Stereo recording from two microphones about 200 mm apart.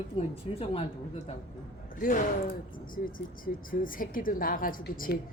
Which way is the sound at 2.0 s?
45° left (ahead or behind).